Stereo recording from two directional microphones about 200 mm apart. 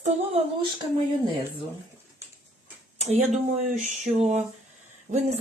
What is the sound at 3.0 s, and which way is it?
Speech, 35° right (ahead or behind).